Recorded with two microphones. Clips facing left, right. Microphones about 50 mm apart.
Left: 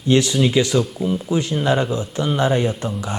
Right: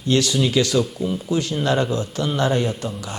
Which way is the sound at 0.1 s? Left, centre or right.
Left.